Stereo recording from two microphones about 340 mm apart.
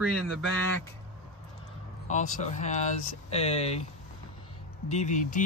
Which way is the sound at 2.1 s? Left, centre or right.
Left.